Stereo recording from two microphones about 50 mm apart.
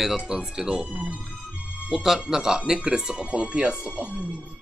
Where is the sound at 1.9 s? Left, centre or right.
Centre.